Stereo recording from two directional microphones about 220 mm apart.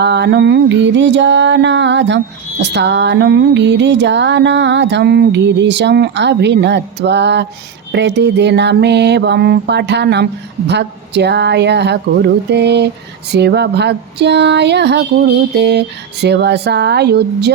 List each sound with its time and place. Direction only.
0.0 s mantra: 50° right (ahead or behind)
16.2 s mantra: 50° right (ahead or behind)